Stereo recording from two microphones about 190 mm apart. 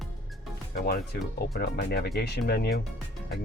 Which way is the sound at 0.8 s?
55° left (ahead or behind).